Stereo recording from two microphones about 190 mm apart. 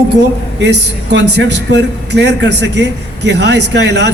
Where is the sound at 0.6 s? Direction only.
65° right (ahead or behind).